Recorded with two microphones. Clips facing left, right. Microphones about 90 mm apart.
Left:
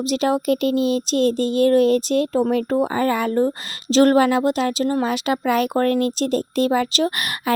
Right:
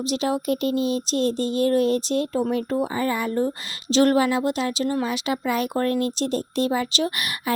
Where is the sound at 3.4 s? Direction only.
45° left (ahead or behind).